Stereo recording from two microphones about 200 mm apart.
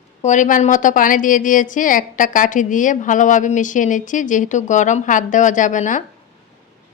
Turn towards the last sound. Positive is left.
turn(degrees=40)  # may be behind; listen again after turning